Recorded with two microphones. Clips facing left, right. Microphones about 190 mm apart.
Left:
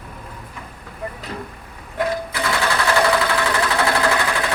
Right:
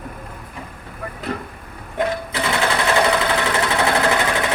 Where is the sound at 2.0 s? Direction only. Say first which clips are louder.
Right 1 dB; 20° right (ahead or behind).